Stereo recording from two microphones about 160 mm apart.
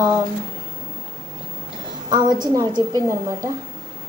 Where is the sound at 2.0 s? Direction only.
25° right (ahead or behind).